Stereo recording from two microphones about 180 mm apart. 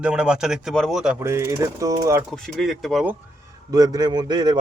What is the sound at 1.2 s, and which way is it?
Speech, 15° right (ahead or behind).